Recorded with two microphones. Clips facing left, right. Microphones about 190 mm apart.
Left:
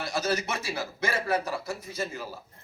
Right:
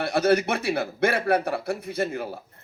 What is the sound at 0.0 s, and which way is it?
A man's voice, 60° right (ahead or behind).